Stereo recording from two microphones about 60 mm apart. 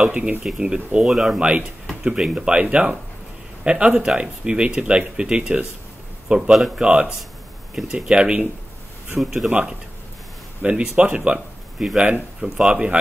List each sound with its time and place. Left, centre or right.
0.0 s speech: right
6.8 s speech: right
9.2 s a man's voice: centre
9.5 s speech: centre